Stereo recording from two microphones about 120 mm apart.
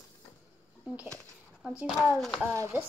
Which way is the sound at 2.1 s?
Centre (ahead or behind).